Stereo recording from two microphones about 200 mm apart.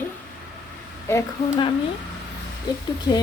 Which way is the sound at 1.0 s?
20° left (ahead or behind).